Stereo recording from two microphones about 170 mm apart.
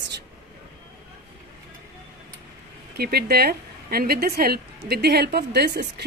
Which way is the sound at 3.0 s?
65° right (ahead or behind).